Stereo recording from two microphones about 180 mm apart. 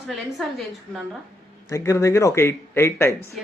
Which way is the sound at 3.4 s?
Centre (ahead or behind).